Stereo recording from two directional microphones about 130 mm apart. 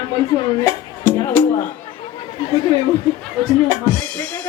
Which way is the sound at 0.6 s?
20° left (ahead or behind).